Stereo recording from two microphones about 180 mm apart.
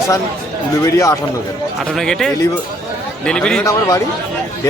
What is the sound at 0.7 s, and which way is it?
Speech, 20° left (ahead or behind).